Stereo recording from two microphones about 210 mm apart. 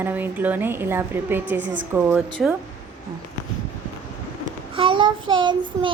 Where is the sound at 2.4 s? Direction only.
Centre (ahead or behind).